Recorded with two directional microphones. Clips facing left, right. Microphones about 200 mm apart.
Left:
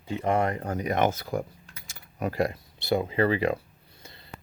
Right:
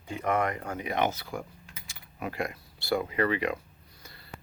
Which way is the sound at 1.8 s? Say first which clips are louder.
Left 6 dB; 45° left (ahead or behind).